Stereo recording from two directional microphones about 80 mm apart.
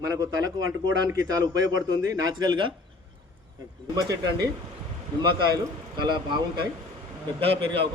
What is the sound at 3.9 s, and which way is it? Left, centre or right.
Speech, right.